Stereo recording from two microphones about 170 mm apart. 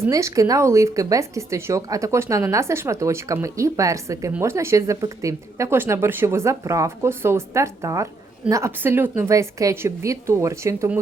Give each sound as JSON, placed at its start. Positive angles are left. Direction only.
{"t": 0.0, "sound": "speech", "side_deg": -15}